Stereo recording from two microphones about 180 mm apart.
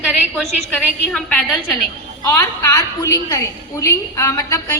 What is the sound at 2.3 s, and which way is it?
A woman's voice, 15° left (ahead or behind).